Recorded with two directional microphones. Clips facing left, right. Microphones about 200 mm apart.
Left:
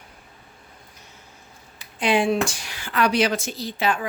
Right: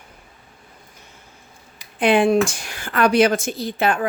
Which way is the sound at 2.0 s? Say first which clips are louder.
Right 5 dB; 55° right (ahead or behind).